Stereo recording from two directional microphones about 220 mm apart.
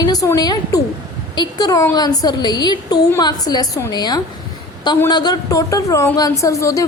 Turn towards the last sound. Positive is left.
turn(degrees=15)  # may be behind; listen again after turning